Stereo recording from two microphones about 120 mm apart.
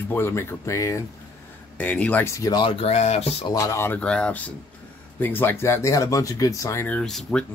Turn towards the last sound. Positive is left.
turn(degrees=5)  # may be behind; listen again after turning